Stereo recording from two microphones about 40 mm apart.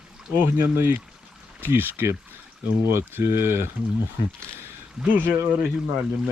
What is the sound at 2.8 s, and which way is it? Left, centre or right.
Speech, right.